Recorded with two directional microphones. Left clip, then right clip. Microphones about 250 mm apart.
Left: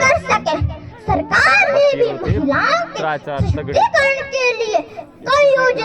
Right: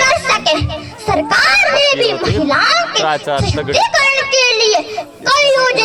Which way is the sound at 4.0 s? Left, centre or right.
Right.